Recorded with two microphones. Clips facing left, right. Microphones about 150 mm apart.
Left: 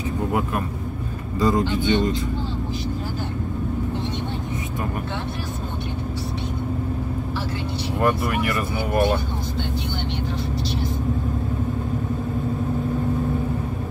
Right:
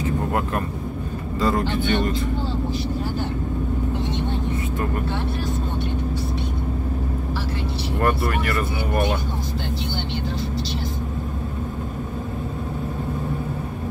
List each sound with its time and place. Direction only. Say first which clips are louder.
1.4 s speech: left 2 dB; 20° left (ahead or behind)
8.0 s speech: left 1 dB; 15° left (ahead or behind)